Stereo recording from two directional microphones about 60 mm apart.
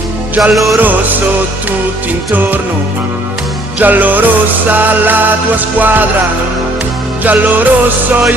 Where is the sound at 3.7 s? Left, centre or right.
Right.